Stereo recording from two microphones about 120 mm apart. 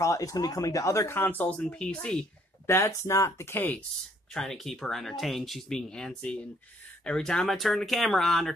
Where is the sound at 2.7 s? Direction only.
20° left (ahead or behind).